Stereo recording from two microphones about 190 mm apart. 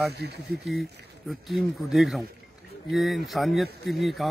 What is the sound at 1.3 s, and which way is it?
A man's voice, centre (ahead or behind).